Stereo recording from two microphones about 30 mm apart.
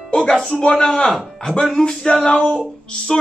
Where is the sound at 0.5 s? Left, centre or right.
Left.